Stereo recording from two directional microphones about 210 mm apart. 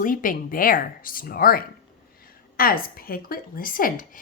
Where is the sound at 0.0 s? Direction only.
40° left (ahead or behind).